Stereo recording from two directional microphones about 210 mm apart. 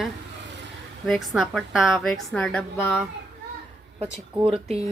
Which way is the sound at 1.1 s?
Centre (ahead or behind).